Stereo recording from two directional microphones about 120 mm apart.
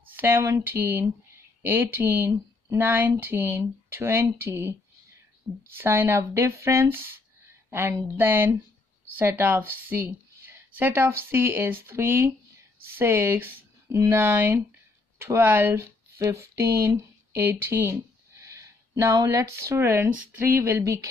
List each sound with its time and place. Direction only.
0.1 s a woman's voice: 15° right (ahead or behind)